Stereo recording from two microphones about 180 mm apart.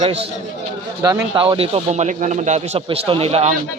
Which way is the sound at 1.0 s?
20° right (ahead or behind).